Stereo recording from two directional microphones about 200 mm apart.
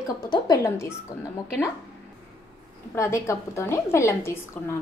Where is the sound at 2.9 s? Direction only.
15° left (ahead or behind).